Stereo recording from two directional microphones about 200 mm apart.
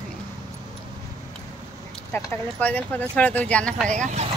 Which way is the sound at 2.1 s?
10° left (ahead or behind).